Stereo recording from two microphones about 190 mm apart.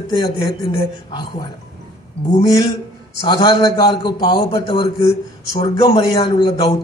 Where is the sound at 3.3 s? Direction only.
20° left (ahead or behind).